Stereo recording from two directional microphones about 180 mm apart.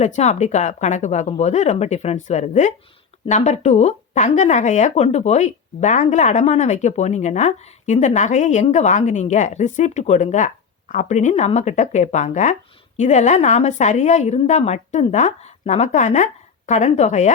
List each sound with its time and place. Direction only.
0.0 s speech: 40° left (ahead or behind)